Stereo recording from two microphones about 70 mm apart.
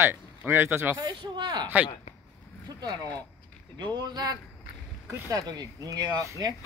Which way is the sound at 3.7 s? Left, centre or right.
Right.